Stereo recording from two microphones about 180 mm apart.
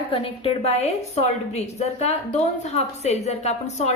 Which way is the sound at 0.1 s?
30° left (ahead or behind).